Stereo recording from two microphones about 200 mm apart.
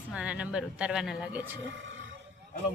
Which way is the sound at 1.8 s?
70° right (ahead or behind).